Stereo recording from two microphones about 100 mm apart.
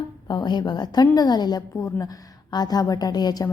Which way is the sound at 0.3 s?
45° left (ahead or behind).